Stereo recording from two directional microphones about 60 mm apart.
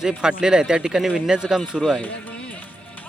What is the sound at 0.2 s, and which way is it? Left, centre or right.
Speech, centre.